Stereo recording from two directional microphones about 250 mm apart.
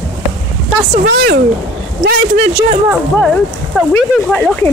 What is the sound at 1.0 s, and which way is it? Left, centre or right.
Speech, right.